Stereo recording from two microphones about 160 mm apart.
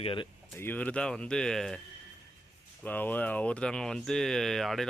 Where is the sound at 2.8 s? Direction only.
10° left (ahead or behind).